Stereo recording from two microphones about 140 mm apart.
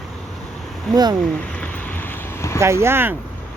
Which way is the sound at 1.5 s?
10° left (ahead or behind).